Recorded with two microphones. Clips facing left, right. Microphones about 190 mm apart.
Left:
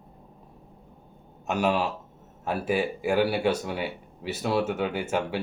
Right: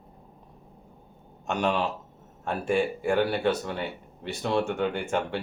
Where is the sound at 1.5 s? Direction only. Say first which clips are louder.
Left 1 dB; 5° left (ahead or behind).